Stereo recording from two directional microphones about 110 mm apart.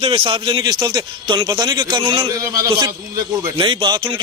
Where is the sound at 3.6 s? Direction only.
45° right (ahead or behind).